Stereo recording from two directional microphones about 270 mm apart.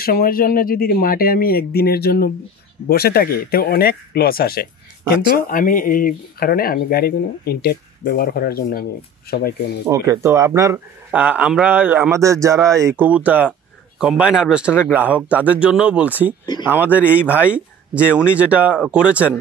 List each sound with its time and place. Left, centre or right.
0.0 s speech: left
9.8 s speech: centre